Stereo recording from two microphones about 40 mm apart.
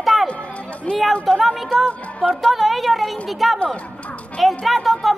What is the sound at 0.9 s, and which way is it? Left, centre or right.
Speech, left.